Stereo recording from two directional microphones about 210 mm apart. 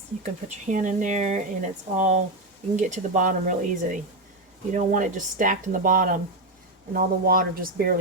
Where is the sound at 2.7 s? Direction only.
35° right (ahead or behind).